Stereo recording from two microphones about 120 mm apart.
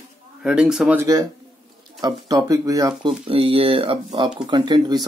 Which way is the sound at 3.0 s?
50° right (ahead or behind).